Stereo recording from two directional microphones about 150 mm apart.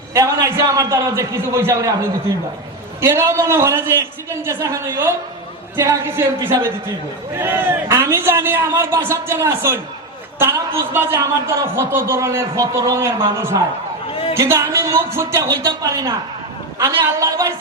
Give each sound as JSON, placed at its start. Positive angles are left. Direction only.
{"t": 0.1, "sound": "a man's voice", "side_deg": -20}
{"t": 14.1, "sound": "a man's voice", "side_deg": 40}
{"t": 14.3, "sound": "a man's voice", "side_deg": -20}